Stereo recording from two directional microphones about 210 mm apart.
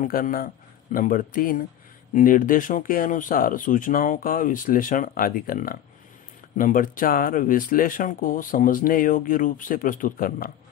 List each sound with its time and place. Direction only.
0.0 s a man's voice: 40° left (ahead or behind)